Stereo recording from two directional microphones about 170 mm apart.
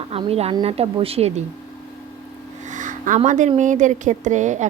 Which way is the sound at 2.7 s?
50° right (ahead or behind).